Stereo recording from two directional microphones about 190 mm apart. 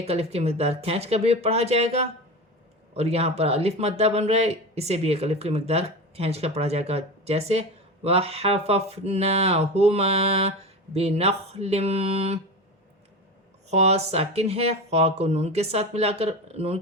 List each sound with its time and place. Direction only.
0.0 s speech: 30° right (ahead or behind)
13.7 s speech: 35° right (ahead or behind)